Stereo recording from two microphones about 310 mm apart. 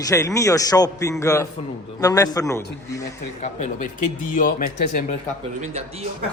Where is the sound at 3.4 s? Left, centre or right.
Left.